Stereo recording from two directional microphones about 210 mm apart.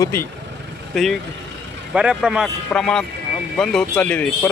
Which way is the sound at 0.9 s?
Centre (ahead or behind).